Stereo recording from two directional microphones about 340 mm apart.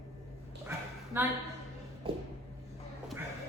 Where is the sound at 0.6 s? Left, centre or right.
Centre.